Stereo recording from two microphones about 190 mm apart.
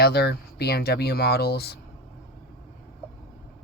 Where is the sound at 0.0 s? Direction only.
55° left (ahead or behind).